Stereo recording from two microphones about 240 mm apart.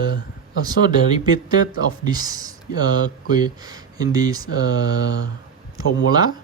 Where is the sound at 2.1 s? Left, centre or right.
Centre.